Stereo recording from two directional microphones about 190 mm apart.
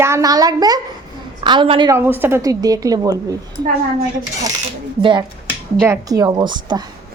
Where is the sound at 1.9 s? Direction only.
10° right (ahead or behind).